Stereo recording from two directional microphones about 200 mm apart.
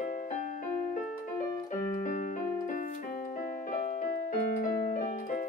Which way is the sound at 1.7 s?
40° left (ahead or behind).